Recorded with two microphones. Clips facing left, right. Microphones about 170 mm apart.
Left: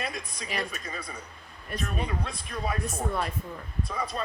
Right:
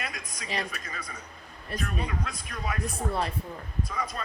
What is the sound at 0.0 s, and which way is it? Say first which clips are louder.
Speech: left 3 dB; 30° left (ahead or behind).